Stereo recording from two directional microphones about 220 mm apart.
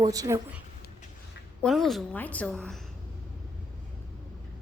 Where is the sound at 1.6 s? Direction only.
Centre (ahead or behind).